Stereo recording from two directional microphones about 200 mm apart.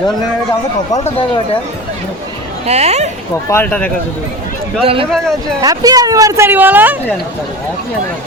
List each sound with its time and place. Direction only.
2.6 s speech: 30° right (ahead or behind)
3.5 s speech: 10° left (ahead or behind)
4.8 s speech: 30° right (ahead or behind)
5.1 s speech: centre (ahead or behind)
5.6 s speech: 20° right (ahead or behind)